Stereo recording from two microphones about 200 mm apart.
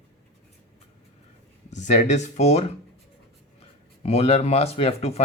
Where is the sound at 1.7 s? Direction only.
35° left (ahead or behind).